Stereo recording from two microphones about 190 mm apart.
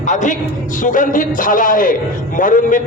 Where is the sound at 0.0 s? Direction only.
40° left (ahead or behind).